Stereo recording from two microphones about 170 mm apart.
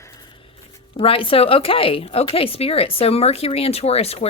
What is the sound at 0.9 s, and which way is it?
A woman's voice, 30° left (ahead or behind).